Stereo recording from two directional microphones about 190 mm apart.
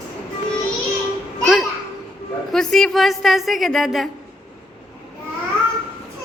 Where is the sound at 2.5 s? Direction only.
Centre (ahead or behind).